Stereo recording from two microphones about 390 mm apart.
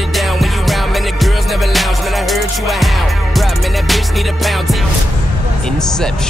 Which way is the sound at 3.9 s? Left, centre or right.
Centre.